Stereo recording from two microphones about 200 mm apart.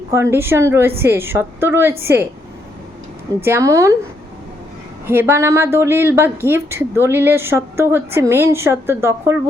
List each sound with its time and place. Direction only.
0.1 s a woman's voice: 15° right (ahead or behind)
3.4 s a woman's voice: 15° right (ahead or behind)
5.0 s a woman's voice: 10° right (ahead or behind)